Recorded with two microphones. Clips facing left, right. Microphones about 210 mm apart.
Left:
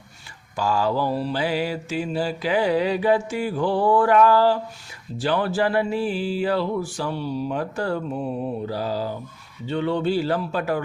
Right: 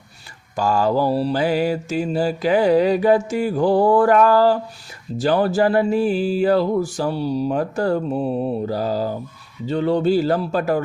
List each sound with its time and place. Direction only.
0.5 s mantra: 45° right (ahead or behind)
9.6 s a man's voice: 40° right (ahead or behind)